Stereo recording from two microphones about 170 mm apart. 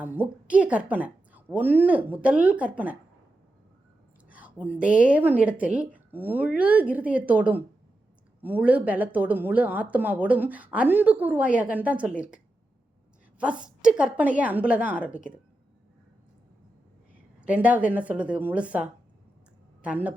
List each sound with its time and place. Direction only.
0.0 s a woman's voice: 10° right (ahead or behind)
4.3 s a sound: 10° right (ahead or behind)
5.0 s a woman's voice: 10° right (ahead or behind)
13.4 s a woman's voice: 5° right (ahead or behind)
17.4 s a woman's voice: 10° right (ahead or behind)